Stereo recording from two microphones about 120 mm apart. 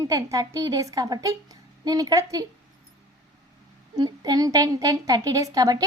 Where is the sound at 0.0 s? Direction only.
30° right (ahead or behind).